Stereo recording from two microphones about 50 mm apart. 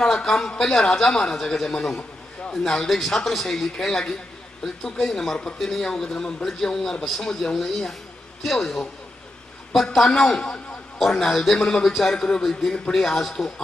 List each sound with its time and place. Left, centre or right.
0.0 s a man's voice: centre
9.9 s a man's voice: centre